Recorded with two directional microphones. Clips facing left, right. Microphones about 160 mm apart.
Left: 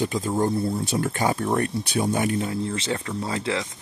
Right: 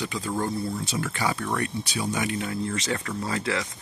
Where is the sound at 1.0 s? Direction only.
45° left (ahead or behind).